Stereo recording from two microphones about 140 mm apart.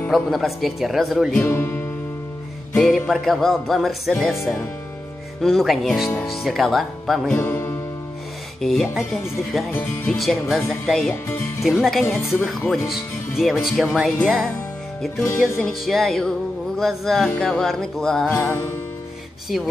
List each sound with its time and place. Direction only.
0.1 s speech: centre (ahead or behind)
1.4 s music: 15° left (ahead or behind)
2.7 s speech: centre (ahead or behind)
7.3 s music: 15° left (ahead or behind)
8.5 s speech: 5° left (ahead or behind)
15.6 s speech: centre (ahead or behind)
18.3 s music: 20° left (ahead or behind)